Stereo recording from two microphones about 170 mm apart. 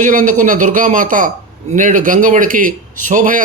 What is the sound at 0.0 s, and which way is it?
A man's voice, 50° right (ahead or behind).